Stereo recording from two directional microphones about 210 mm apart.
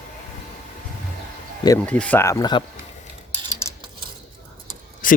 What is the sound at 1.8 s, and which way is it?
Speech, 5° left (ahead or behind).